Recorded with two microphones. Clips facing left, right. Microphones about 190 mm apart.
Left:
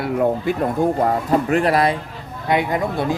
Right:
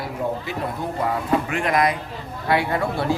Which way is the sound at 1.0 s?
40° left (ahead or behind).